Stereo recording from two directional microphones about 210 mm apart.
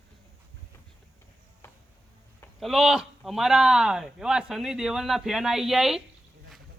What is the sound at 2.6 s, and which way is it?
Speech, centre (ahead or behind).